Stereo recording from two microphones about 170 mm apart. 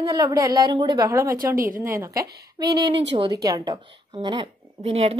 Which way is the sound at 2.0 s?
20° right (ahead or behind).